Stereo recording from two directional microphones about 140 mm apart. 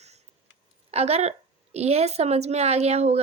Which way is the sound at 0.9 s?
50° right (ahead or behind).